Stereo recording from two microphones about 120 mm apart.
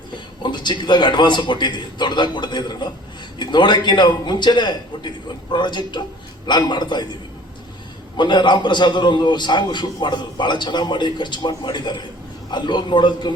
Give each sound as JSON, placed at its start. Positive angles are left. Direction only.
{"t": 0.4, "sound": "a man's voice", "side_deg": 40}
{"t": 8.1, "sound": "a man's voice", "side_deg": 40}